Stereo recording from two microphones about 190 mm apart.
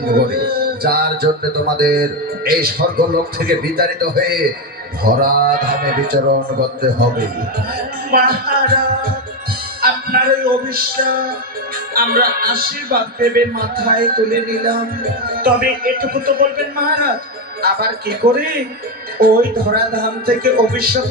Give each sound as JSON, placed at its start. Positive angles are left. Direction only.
{"t": 0.0, "sound": "a man's voice", "side_deg": -55}
{"t": 5.0, "sound": "music", "side_deg": -50}
{"t": 8.1, "sound": "a man's voice", "side_deg": -55}
{"t": 9.8, "sound": "music", "side_deg": -55}
{"t": 17.6, "sound": "a man's voice", "side_deg": -55}
{"t": 19.2, "sound": "music", "side_deg": -55}